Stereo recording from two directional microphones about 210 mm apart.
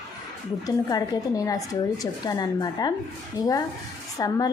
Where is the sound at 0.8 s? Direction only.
15° left (ahead or behind).